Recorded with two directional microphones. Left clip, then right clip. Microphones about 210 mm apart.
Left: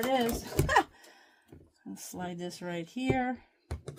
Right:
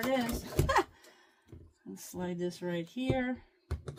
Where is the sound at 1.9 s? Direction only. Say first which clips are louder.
Even; 40° left (ahead or behind).